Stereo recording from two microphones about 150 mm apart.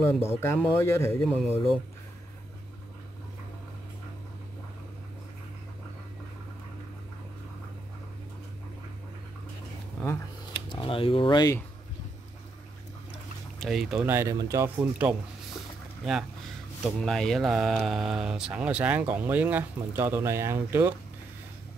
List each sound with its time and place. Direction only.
0.2 s speech: 15° left (ahead or behind)
1.2 s speech: 5° left (ahead or behind)
10.7 s speech: 35° left (ahead or behind)
13.6 s speech: centre (ahead or behind)
14.0 s speech: 20° right (ahead or behind)
14.8 s speech: 10° right (ahead or behind)